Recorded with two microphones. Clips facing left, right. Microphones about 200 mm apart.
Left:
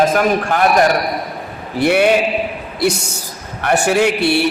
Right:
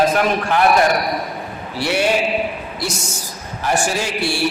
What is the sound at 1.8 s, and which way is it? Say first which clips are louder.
Speech: left 7 dB; 55° left (ahead or behind).